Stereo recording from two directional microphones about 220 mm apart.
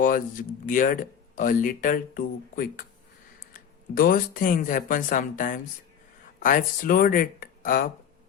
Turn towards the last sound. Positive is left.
turn(degrees=40)  # may be behind; listen again after turning